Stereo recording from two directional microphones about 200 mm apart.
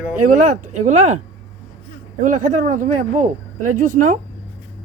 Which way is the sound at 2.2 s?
40° right (ahead or behind).